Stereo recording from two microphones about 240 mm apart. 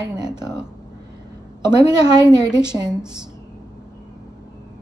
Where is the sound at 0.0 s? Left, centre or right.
Centre.